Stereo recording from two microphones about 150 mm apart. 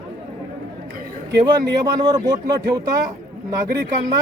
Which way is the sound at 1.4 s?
25° right (ahead or behind).